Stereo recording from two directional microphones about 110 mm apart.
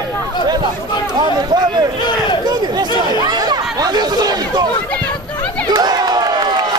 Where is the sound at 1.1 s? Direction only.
40° right (ahead or behind).